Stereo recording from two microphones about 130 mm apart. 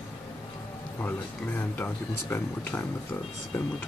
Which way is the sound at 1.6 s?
15° left (ahead or behind).